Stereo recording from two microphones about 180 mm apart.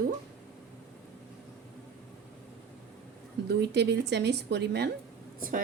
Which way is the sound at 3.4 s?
70° right (ahead or behind).